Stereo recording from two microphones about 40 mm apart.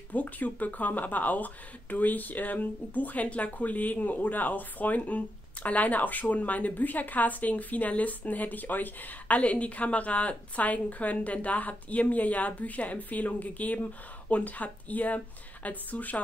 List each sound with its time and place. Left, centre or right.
0.1 s speech: left
9.4 s a woman's voice: left